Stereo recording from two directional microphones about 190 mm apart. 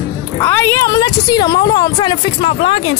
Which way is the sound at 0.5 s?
10° left (ahead or behind).